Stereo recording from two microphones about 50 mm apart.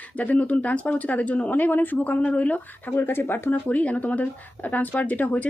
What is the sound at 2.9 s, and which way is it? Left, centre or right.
Speech, left.